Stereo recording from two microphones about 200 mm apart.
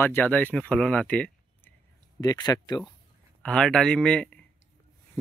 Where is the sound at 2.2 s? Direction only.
20° left (ahead or behind).